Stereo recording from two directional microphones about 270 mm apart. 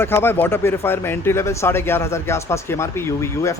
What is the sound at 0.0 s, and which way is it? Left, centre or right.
Speech, centre.